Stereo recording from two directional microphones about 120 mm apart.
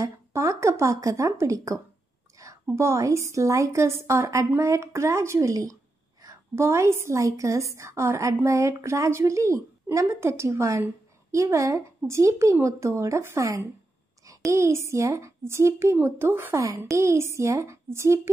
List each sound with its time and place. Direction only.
0.0 s a woman's voice: 25° right (ahead or behind)
2.3 s a sound: 30° right (ahead or behind)
2.7 s a woman's voice: 25° right (ahead or behind)